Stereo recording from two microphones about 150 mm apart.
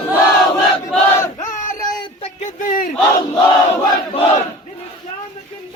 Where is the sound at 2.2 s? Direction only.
50° left (ahead or behind).